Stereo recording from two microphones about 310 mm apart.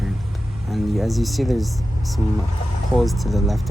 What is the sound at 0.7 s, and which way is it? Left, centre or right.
Speech, centre.